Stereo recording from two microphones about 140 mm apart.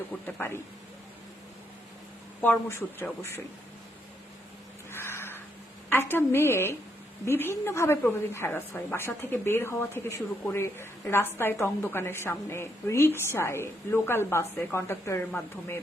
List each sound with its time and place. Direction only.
0.3 s a woman's voice: 15° left (ahead or behind)
2.4 s a woman's voice: 15° left (ahead or behind)
4.9 s crow: 15° left (ahead or behind)
5.9 s a woman's voice: 15° left (ahead or behind)